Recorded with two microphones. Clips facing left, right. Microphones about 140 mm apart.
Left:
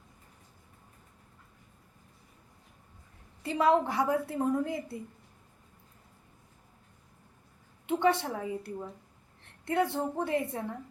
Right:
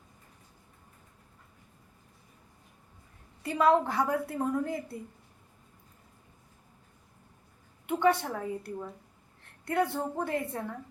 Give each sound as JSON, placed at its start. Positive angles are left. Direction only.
{"t": 3.4, "sound": "a woman's voice", "side_deg": 25}
{"t": 7.9, "sound": "a woman's voice", "side_deg": 25}